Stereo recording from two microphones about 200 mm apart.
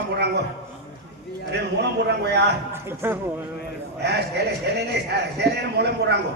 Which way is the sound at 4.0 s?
55° right (ahead or behind).